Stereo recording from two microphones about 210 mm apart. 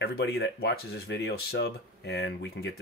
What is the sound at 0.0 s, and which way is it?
Speech, 50° left (ahead or behind).